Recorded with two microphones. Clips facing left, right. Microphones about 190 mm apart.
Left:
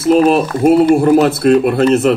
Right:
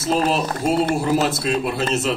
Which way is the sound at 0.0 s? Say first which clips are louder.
Left 10 dB; 60° left (ahead or behind).